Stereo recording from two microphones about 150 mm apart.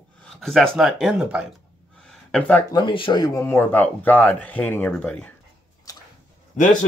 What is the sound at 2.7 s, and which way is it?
Speech, 35° left (ahead or behind).